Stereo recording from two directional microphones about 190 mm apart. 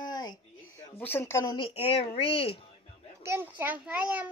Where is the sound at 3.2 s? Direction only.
10° right (ahead or behind).